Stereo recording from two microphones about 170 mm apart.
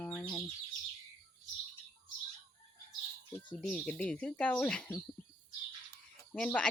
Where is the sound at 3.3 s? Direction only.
5° left (ahead or behind).